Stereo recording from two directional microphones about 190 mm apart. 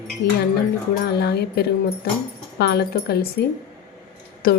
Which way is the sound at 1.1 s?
60° left (ahead or behind).